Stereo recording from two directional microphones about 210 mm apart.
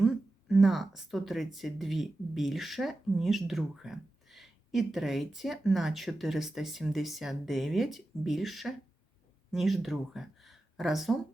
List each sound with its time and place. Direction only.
0.0 s speech: centre (ahead or behind)